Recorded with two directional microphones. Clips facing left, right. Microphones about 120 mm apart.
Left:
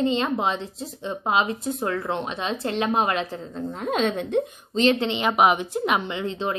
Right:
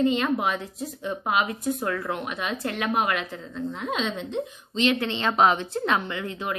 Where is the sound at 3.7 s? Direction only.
45° left (ahead or behind).